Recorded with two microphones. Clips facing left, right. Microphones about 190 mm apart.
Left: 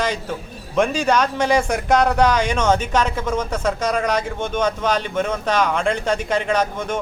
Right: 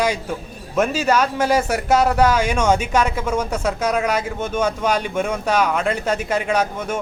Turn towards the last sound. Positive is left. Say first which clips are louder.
# even
turn(degrees=-10)  # may be behind; listen again after turning